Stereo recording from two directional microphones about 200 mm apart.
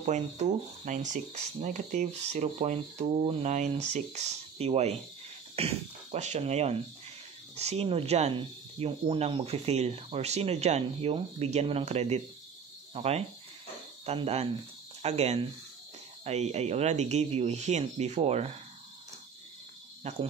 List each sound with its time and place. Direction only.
0.0 s speech: 35° right (ahead or behind)
20.0 s speech: 30° right (ahead or behind)